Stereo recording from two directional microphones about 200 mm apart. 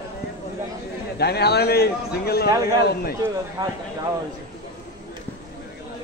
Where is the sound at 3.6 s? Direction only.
20° right (ahead or behind).